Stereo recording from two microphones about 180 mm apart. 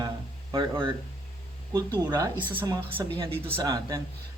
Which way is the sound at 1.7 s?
20° right (ahead or behind).